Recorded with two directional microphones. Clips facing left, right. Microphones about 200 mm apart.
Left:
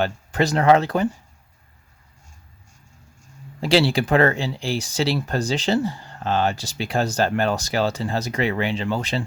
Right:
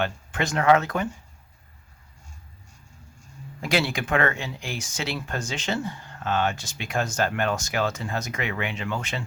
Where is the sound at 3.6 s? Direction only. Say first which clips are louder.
Left 7 dB; 30° left (ahead or behind).